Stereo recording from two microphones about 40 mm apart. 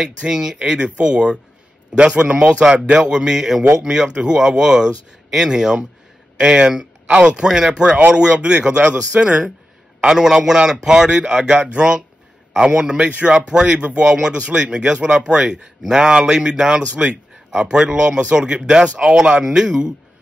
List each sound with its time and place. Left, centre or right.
0.3 s a man's voice: centre
9.1 s speech: right
9.9 s a man's voice: centre
19.4 s speech: centre